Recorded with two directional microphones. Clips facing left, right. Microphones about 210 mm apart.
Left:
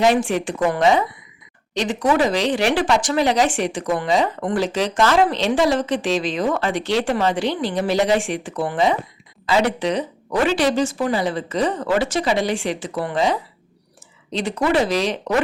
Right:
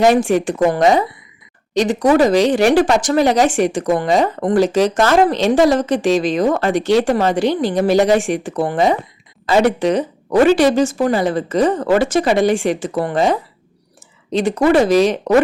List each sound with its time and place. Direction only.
0.0 s a woman's voice: 45° right (ahead or behind)